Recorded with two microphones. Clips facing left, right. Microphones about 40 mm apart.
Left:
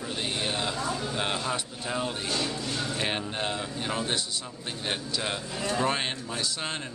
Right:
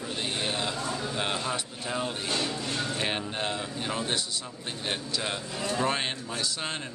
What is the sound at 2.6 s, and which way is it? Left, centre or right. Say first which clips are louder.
Speech: even; right.